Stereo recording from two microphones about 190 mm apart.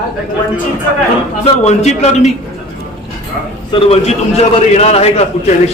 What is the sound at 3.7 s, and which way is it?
A man's voice, 30° left (ahead or behind).